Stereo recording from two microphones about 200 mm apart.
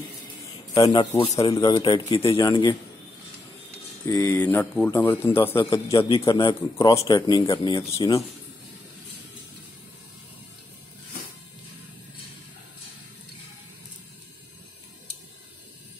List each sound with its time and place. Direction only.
0.7 s a man's voice: 20° left (ahead or behind)
4.1 s a man's voice: 15° left (ahead or behind)